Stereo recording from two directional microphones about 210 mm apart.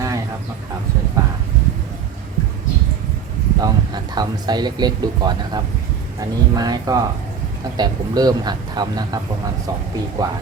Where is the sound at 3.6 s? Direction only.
20° right (ahead or behind).